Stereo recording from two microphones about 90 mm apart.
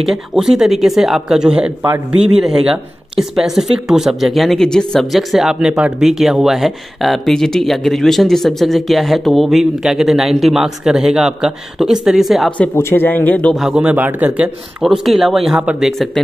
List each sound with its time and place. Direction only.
0.0 s speech: 5° right (ahead or behind)
3.2 s speech: 5° right (ahead or behind)
12.7 s a man's voice: 25° left (ahead or behind)
13.6 s a man's voice: 10° right (ahead or behind)
14.8 s speech: centre (ahead or behind)